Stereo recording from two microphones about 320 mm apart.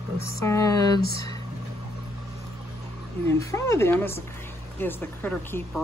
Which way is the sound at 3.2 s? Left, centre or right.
Centre.